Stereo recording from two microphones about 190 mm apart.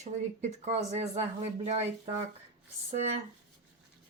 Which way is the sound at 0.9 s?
35° right (ahead or behind).